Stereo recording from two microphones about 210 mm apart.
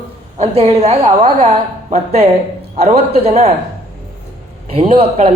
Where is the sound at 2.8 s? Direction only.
30° right (ahead or behind).